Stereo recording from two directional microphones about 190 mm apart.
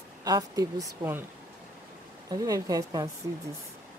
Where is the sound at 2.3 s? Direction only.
20° right (ahead or behind).